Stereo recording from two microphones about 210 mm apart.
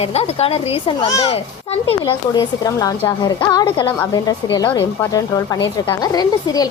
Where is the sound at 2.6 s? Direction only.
15° left (ahead or behind).